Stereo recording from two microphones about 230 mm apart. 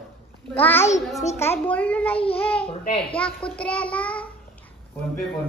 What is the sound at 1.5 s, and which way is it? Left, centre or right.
Speech, centre.